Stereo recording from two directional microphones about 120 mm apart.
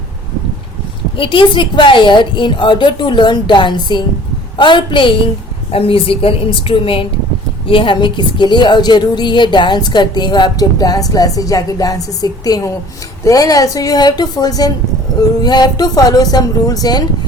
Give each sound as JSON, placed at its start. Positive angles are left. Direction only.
{"t": 1.1, "sound": "a woman's voice", "side_deg": 45}